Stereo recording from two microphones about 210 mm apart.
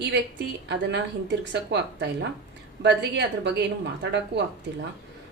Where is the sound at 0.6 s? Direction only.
55° right (ahead or behind).